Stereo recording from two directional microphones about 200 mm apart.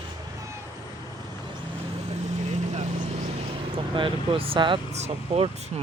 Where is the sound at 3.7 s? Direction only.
25° right (ahead or behind).